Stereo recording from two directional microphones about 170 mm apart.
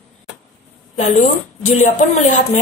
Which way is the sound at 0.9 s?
45° left (ahead or behind).